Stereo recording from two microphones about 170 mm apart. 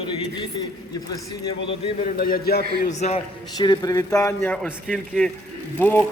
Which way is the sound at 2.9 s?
40° left (ahead or behind).